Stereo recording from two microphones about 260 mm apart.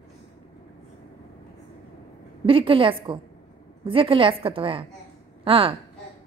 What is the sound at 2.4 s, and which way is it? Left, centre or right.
A woman's voice, right.